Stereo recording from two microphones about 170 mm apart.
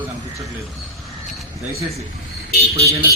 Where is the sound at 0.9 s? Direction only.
Centre (ahead or behind).